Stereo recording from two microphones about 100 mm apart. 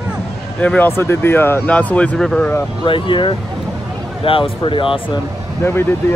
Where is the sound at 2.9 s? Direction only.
55° left (ahead or behind).